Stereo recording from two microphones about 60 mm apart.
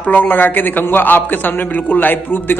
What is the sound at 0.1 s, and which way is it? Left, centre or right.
A man's voice, left.